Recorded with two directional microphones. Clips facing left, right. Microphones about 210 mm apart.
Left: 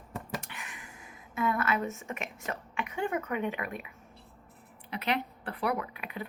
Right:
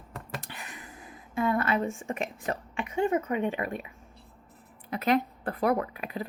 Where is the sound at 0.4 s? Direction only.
35° right (ahead or behind).